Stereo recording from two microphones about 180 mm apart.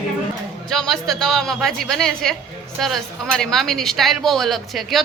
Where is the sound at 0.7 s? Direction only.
Centre (ahead or behind).